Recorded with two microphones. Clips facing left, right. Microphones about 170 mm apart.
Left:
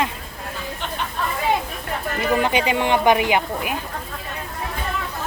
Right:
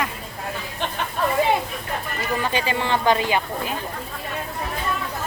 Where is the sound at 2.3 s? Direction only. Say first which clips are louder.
Left 4 dB; 20° left (ahead or behind).